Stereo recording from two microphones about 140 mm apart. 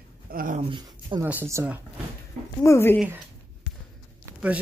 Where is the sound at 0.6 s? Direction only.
35° right (ahead or behind).